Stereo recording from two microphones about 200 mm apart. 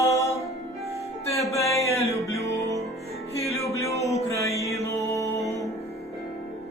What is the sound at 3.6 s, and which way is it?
Music, 15° left (ahead or behind).